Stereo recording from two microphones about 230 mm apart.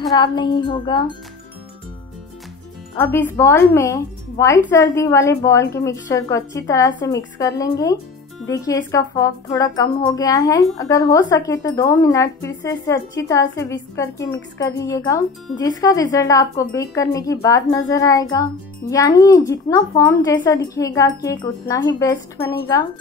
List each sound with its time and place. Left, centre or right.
0.1 s wind chime: centre
3.0 s speech: centre